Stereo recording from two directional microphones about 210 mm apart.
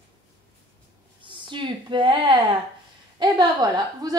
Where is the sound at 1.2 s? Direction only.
25° right (ahead or behind).